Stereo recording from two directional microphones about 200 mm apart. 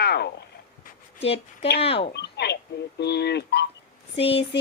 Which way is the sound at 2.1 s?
55° left (ahead or behind).